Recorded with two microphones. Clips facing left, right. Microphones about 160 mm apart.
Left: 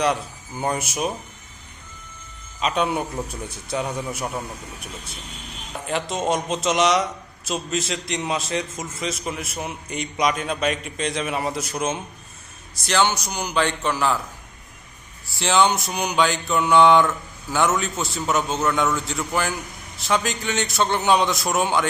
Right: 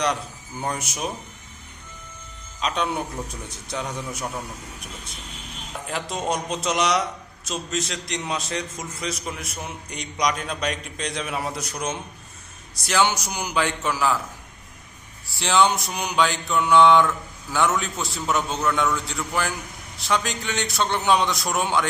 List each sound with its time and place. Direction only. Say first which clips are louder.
0.6 s speech: left 4 dB; 10° left (ahead or behind)
2.6 s a man's voice: left 3 dB; 5° left (ahead or behind)
5.9 s a man's voice: left 4 dB; centre (ahead or behind)
12.8 s a man's voice: left 1 dB; 5° right (ahead or behind)
15.4 s a man's voice: left 1 dB; centre (ahead or behind)